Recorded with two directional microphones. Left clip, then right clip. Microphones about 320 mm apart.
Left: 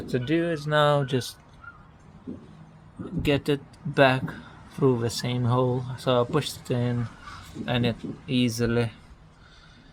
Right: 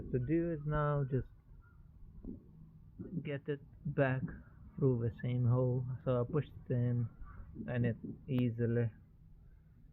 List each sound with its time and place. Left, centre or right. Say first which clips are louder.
0.1 s speech: left 10 dB; centre
3.2 s speech: left 17 dB; centre